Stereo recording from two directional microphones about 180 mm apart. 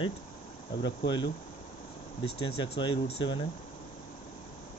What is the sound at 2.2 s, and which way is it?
Speech, 30° left (ahead or behind).